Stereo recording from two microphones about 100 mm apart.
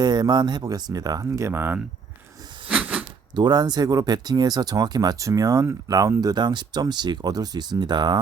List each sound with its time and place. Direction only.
0.0 s speech: 45° right (ahead or behind); by 1.8 s 20° right (ahead or behind)
2.6 s a sound: 15° right (ahead or behind)
3.3 s speech: 45° right (ahead or behind)